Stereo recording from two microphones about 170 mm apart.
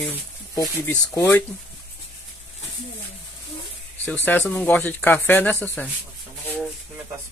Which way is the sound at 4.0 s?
10° left (ahead or behind).